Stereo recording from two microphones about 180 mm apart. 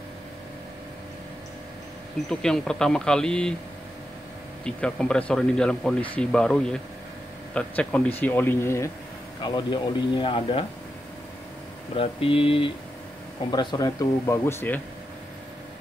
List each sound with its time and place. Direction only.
2.2 s speech: 5° left (ahead or behind)
4.6 s speech: 5° left (ahead or behind)
9.4 s speech: 25° left (ahead or behind)
11.9 s speech: 30° left (ahead or behind); by 14.8 s 10° left (ahead or behind)